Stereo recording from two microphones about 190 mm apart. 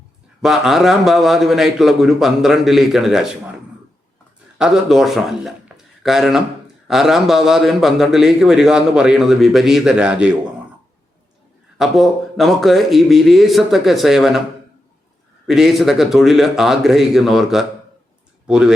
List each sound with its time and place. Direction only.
0.4 s a man's voice: centre (ahead or behind)
4.5 s a man's voice: 5° right (ahead or behind)
11.8 s a man's voice: centre (ahead or behind)
15.4 s a man's voice: centre (ahead or behind)